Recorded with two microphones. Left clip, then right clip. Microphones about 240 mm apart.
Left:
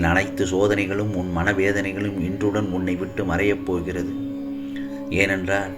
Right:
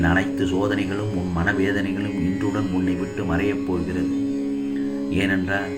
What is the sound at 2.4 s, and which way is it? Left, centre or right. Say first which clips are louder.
Speech: left 5 dB; left.